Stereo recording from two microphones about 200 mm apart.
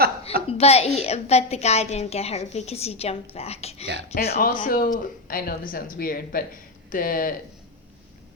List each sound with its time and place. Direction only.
0.4 s a woman's voice: 30° left (ahead or behind)
4.1 s speech: 50° left (ahead or behind)